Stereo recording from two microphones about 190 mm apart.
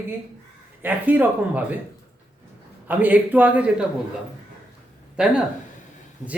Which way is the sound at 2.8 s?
10° right (ahead or behind).